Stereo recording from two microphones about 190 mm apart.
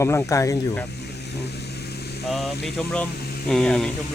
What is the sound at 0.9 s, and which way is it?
Vehicle, 60° left (ahead or behind).